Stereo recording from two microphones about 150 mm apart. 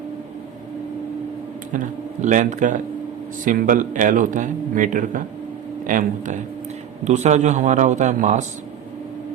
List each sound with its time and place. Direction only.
1.7 s speech: 55° right (ahead or behind)